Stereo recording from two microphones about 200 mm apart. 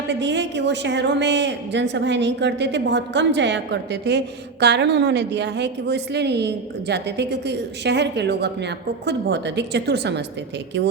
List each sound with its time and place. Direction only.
0.1 s a woman's voice: 60° right (ahead or behind)